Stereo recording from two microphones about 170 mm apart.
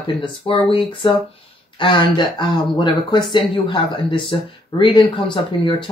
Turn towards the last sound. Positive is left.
turn(degrees=30)  # may be behind; listen again after turning